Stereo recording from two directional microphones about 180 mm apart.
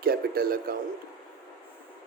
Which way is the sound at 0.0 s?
55° right (ahead or behind).